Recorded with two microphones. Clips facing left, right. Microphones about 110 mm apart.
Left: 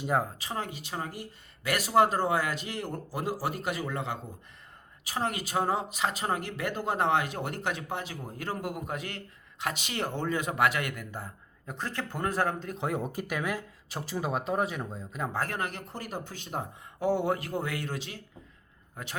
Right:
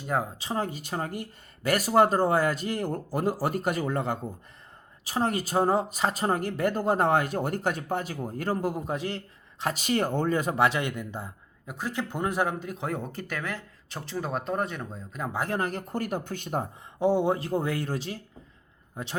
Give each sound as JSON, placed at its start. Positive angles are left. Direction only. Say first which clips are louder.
{"t": 0.3, "sound": "speech", "louder": "right 5 dB", "side_deg": -30}
{"t": 11.6, "sound": "speech", "louder": "right 3 dB", "side_deg": -10}
{"t": 15.4, "sound": "speech", "louder": "right 5 dB", "side_deg": -35}
{"t": 15.9, "sound": "speech", "louder": "right 7 dB", "side_deg": -55}
{"t": 17.0, "sound": "speech", "louder": "right 4 dB", "side_deg": -25}